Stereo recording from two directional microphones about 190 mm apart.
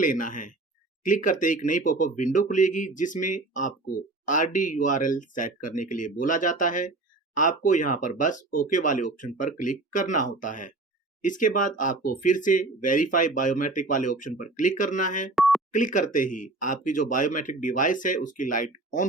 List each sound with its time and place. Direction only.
0.0 s speech: 45° left (ahead or behind)
15.4 s dial tone: centre (ahead or behind)
15.7 s speech: 45° left (ahead or behind)